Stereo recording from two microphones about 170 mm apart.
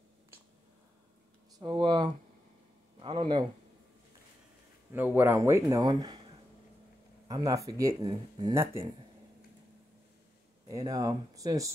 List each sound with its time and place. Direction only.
1.6 s a sound: 25° right (ahead or behind)
4.9 s speech: 10° right (ahead or behind)
10.7 s speech: 20° right (ahead or behind)